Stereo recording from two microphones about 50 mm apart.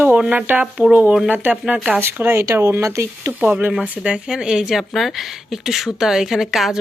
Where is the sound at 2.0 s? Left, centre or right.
Right.